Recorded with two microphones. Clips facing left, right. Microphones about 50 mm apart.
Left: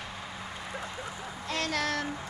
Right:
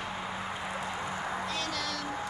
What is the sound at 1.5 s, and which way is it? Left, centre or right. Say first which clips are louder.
Music: left 4 dB; left.